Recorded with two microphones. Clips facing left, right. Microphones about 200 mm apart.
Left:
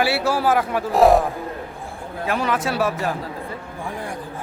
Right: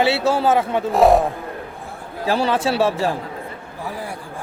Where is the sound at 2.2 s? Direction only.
30° right (ahead or behind).